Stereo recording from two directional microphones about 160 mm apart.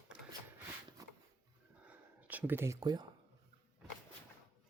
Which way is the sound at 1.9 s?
10° right (ahead or behind).